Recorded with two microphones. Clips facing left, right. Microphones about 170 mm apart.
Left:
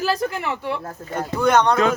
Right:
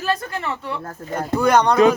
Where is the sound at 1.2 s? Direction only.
10° right (ahead or behind).